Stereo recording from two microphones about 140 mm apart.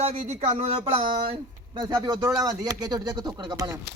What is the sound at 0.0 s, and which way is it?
Speech, 50° right (ahead or behind).